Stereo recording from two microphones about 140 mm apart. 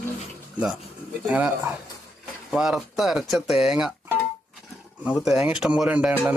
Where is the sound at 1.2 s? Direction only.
10° right (ahead or behind).